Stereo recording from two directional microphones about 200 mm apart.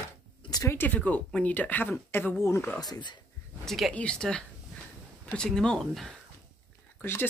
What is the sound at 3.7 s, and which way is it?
Speech, centre (ahead or behind).